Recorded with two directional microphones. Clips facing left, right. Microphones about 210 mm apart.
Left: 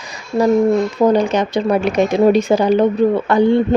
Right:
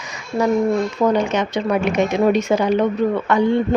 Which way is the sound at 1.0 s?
35° left (ahead or behind).